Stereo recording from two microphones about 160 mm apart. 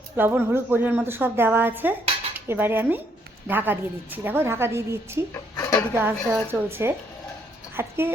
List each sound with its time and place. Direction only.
0.2 s a woman's voice: 15° right (ahead or behind)
5.3 s a woman's voice: 15° left (ahead or behind)
5.9 s a woman's voice: 15° right (ahead or behind)